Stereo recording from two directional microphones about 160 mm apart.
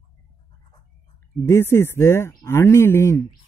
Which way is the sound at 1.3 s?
15° left (ahead or behind).